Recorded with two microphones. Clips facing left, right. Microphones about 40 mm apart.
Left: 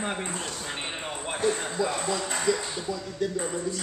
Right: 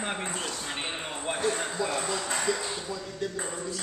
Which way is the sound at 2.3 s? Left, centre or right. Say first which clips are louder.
Left 3 dB; centre.